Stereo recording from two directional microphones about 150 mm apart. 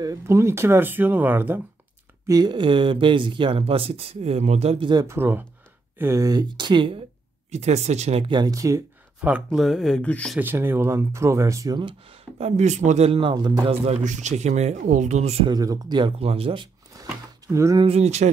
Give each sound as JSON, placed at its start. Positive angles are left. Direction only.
{"t": 0.0, "sound": "speech", "side_deg": -20}
{"t": 2.2, "sound": "speech", "side_deg": -25}
{"t": 5.0, "sound": "speech", "side_deg": -15}
{"t": 7.5, "sound": "speech", "side_deg": -45}
{"t": 9.2, "sound": "speech", "side_deg": -5}
{"t": 10.3, "sound": "speech", "side_deg": -15}
{"t": 12.4, "sound": "speech", "side_deg": -50}
{"t": 13.8, "sound": "speech", "side_deg": -50}
{"t": 15.5, "sound": "speech", "side_deg": -25}
{"t": 17.0, "sound": "a sound", "side_deg": -20}
{"t": 17.8, "sound": "speech", "side_deg": -45}